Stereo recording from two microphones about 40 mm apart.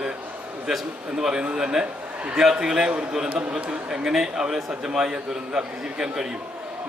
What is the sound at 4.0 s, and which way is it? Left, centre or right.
A man's voice, centre.